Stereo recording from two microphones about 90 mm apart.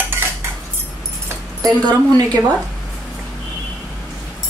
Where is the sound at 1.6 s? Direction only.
45° right (ahead or behind).